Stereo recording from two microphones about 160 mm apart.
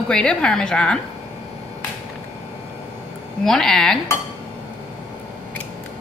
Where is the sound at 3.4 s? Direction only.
Centre (ahead or behind).